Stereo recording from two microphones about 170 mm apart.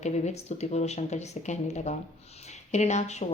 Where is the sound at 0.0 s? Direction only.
40° left (ahead or behind).